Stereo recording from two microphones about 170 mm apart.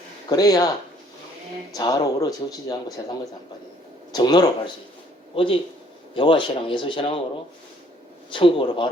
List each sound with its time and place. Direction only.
0.3 s speech: 20° left (ahead or behind)
1.7 s speech: 20° left (ahead or behind)
8.3 s speech: 30° left (ahead or behind)